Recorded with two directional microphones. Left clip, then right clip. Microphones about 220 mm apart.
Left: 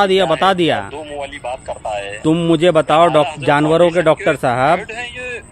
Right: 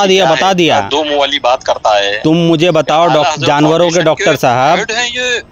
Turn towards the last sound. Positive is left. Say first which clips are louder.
# right 12 dB
turn(degrees=-45)  # may be behind; listen again after turning